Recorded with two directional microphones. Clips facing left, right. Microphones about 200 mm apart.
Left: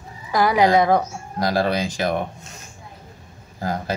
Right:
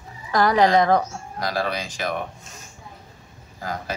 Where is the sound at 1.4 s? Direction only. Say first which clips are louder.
Left 6 dB; 30° left (ahead or behind).